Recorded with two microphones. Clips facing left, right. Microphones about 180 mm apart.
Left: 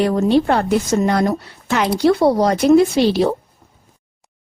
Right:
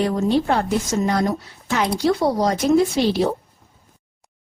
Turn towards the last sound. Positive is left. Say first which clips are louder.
# left 4 dB
turn(degrees=70)  # may be behind; listen again after turning